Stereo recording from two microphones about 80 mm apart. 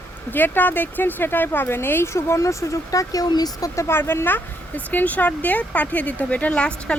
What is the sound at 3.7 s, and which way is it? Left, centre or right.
Speech, left.